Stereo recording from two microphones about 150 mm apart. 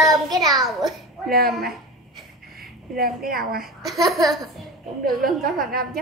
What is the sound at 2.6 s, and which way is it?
A woman's voice, 80° right.